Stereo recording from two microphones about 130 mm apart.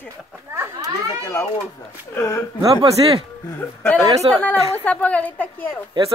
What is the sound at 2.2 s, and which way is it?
Speech, 20° left (ahead or behind).